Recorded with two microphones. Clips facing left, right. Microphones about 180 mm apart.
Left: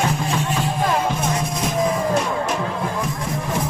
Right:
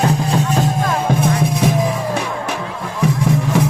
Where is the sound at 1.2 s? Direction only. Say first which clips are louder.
Right 6 dB; 60° right (ahead or behind).